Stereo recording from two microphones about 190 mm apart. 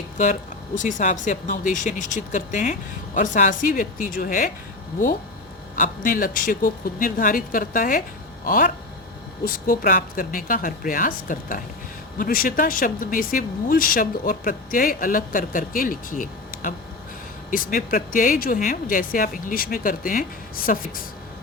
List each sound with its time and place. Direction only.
0.8 s speech: 40° left (ahead or behind)
5.7 s speech: 45° left (ahead or behind)